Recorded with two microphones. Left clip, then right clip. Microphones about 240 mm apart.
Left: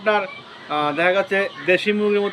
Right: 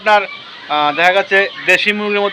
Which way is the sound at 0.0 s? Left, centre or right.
Centre.